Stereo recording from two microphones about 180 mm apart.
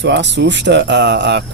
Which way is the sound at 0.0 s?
80° right.